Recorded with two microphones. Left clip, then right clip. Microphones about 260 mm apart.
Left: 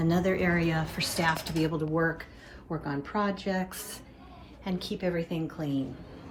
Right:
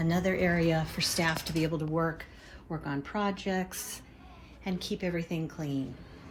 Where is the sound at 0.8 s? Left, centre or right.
Right.